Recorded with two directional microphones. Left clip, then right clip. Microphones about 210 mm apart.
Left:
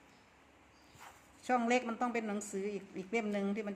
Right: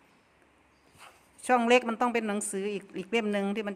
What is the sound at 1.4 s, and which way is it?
A woman's voice, 45° right (ahead or behind).